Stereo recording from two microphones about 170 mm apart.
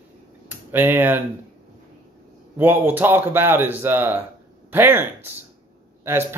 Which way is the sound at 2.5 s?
10° right (ahead or behind).